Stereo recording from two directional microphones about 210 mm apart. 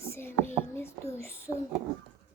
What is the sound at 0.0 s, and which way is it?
Whispering, 10° left (ahead or behind).